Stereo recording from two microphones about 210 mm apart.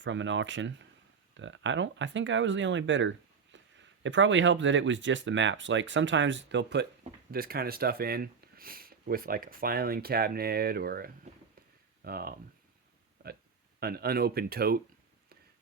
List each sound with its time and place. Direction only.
0.0 s speech: 60° right (ahead or behind); by 12.3 s 45° right (ahead or behind)
13.2 s a sound: 45° right (ahead or behind)
13.7 s speech: 50° right (ahead or behind)